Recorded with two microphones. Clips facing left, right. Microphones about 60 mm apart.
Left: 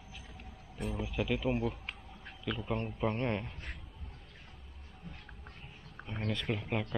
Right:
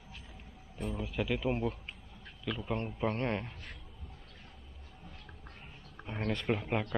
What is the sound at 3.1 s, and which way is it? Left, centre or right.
Speech, centre.